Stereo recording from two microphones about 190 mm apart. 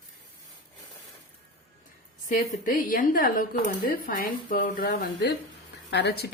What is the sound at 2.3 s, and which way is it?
A woman's voice, 45° left (ahead or behind).